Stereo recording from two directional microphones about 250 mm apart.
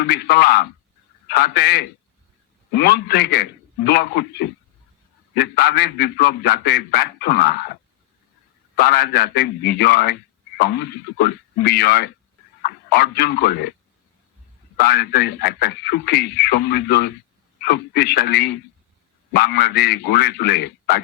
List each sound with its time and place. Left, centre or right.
0.0 s a man's voice: left
8.7 s a man's voice: left
14.8 s a man's voice: left